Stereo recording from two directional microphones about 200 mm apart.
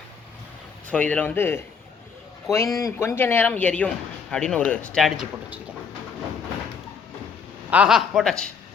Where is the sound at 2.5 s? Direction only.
Centre (ahead or behind).